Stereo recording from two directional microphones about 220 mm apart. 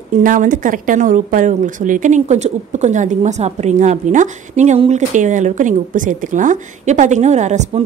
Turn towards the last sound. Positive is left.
turn(degrees=-30)  # may be behind; listen again after turning